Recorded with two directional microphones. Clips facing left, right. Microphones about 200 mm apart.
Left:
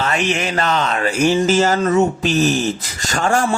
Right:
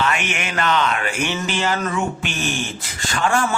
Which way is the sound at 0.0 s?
35° left (ahead or behind).